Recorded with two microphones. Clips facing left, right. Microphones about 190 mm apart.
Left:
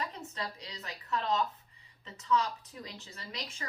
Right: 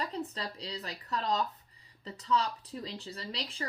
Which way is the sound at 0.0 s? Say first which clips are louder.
Right 3 dB; 35° right (ahead or behind).